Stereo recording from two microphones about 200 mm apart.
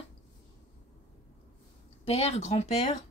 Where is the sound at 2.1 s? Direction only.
30° left (ahead or behind).